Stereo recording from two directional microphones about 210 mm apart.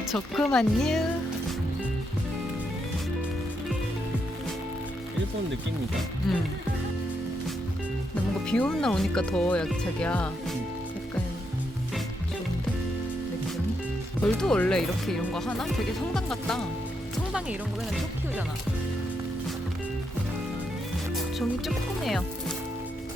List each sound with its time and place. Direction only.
0.1 s speech: centre (ahead or behind)
8.4 s speech: 5° left (ahead or behind)
14.2 s speech: 5° left (ahead or behind)
21.3 s speech: centre (ahead or behind)